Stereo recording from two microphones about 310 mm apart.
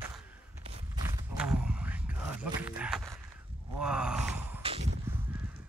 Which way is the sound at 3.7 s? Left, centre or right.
Centre.